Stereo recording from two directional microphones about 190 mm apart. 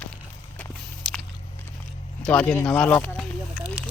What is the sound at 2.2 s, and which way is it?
Speech, 5° left (ahead or behind).